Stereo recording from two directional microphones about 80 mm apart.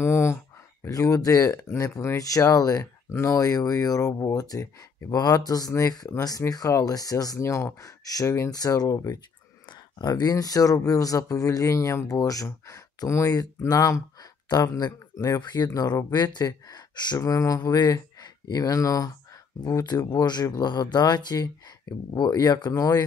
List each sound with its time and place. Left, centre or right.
0.0 s a sound: left
0.8 s speech: left
9.7 s speech: left
17.2 s speech: left